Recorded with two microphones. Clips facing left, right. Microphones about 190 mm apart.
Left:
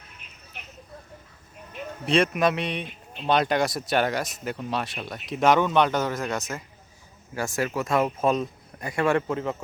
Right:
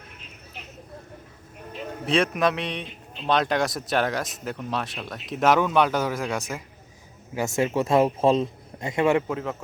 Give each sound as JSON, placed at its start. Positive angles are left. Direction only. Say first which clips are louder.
{"t": 2.0, "sound": "speech", "louder": "left 1 dB", "side_deg": 0}
{"t": 7.3, "sound": "a man's voice", "louder": "right 4 dB", "side_deg": -25}
{"t": 9.2, "sound": "speech", "louder": "left 1 dB", "side_deg": 0}